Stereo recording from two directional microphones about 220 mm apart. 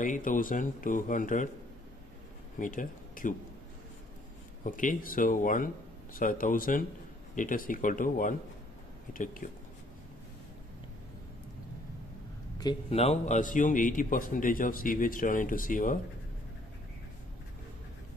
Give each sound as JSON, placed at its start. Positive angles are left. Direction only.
{"t": 0.0, "sound": "a man's voice", "side_deg": 35}
{"t": 2.6, "sound": "speech", "side_deg": 35}
{"t": 4.6, "sound": "a man's voice", "side_deg": 35}
{"t": 12.5, "sound": "a man's voice", "side_deg": 25}